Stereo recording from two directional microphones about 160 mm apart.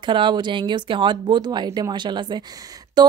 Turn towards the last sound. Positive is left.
turn(degrees=-25)  # may be behind; listen again after turning